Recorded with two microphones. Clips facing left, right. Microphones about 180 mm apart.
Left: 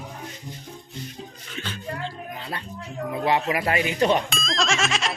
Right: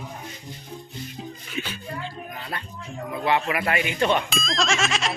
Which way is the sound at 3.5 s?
35° left (ahead or behind).